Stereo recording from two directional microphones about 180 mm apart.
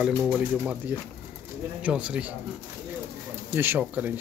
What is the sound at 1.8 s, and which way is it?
Speech, 5° right (ahead or behind).